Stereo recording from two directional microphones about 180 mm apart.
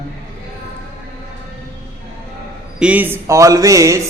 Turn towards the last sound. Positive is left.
turn(degrees=-15)  # may be behind; listen again after turning